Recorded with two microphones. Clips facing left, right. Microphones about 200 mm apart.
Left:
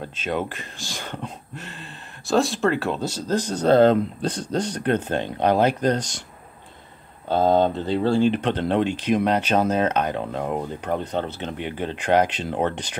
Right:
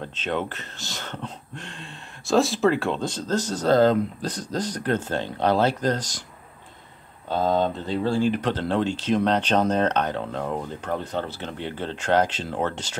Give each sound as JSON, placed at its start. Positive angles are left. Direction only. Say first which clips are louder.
{"t": 0.1, "sound": "speech", "louder": "left 1 dB", "side_deg": 10}
{"t": 7.2, "sound": "speech", "louder": "left 4 dB", "side_deg": 30}